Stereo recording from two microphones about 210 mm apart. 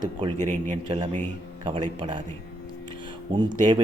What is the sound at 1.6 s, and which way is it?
Speech, 25° right (ahead or behind).